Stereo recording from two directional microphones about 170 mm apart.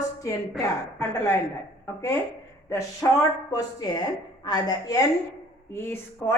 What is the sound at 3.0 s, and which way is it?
Speech, 15° left (ahead or behind).